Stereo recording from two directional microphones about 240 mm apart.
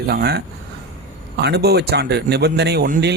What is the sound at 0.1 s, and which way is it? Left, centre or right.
A man's voice, right.